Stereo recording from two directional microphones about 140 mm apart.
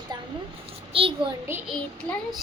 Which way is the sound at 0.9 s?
40° right (ahead or behind).